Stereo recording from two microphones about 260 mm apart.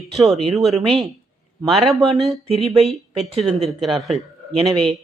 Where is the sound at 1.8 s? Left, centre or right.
Centre.